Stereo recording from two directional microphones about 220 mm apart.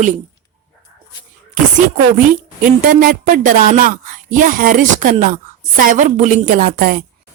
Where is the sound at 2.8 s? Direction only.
40° right (ahead or behind).